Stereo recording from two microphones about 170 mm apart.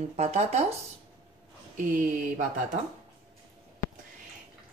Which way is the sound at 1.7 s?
50° right (ahead or behind).